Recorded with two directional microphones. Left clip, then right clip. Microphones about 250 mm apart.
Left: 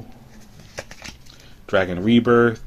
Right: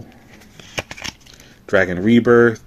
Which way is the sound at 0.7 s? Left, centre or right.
Right.